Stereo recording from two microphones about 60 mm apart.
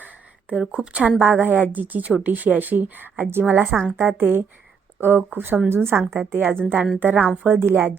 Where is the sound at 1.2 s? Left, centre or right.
Right.